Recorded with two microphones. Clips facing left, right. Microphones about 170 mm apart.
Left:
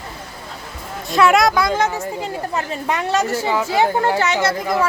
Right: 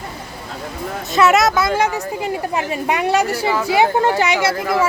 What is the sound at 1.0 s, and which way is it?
Speech, centre (ahead or behind).